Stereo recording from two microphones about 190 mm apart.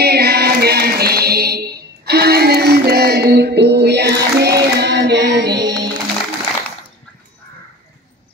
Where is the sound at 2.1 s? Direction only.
55° right (ahead or behind).